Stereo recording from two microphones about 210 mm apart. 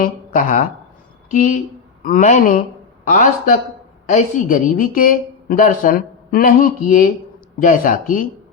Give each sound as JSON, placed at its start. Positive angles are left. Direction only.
{"t": 0.0, "sound": "a woman's voice", "side_deg": 40}